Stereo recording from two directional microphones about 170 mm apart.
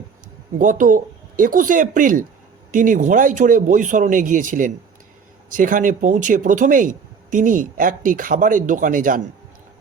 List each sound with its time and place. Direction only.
0.6 s speech: 50° right (ahead or behind)